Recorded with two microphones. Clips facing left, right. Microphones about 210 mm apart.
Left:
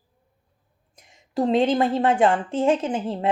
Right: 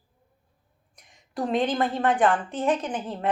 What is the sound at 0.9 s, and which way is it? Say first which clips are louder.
Speech: left 8 dB; 25° left (ahead or behind).